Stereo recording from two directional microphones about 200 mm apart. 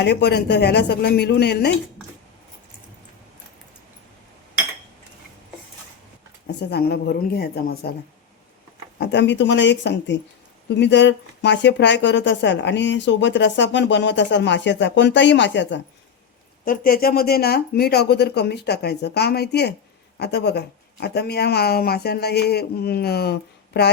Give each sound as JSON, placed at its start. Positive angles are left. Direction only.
{"t": 0.0, "sound": "a woman's voice", "side_deg": 55}
{"t": 6.6, "sound": "speech", "side_deg": 55}
{"t": 9.0, "sound": "a woman's voice", "side_deg": 60}
{"t": 16.6, "sound": "a woman's voice", "side_deg": 45}